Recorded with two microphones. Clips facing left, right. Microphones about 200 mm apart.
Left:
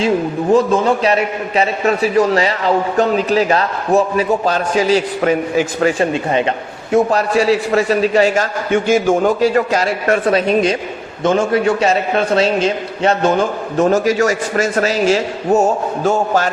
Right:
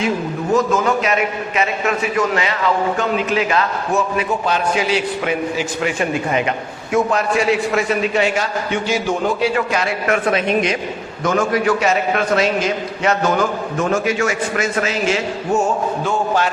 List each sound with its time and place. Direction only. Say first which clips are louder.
0.5 s a man's voice: left 3 dB; 30° left (ahead or behind)
6.1 s a man's voice: left 3 dB; 30° left (ahead or behind)